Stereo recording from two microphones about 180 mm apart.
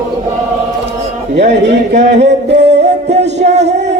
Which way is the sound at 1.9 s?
40° right (ahead or behind).